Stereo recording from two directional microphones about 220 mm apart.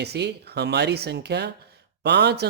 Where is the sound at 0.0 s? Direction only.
50° right (ahead or behind).